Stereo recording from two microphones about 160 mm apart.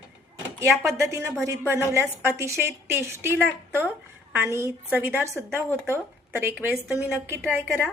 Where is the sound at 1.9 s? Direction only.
15° right (ahead or behind); by 7.9 s centre (ahead or behind).